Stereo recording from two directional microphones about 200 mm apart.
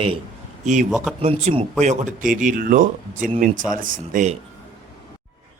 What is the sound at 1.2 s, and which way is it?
Speech, 30° right (ahead or behind).